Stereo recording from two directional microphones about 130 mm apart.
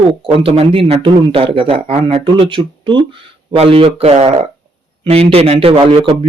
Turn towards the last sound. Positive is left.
turn(degrees=-45)  # may be behind; listen again after turning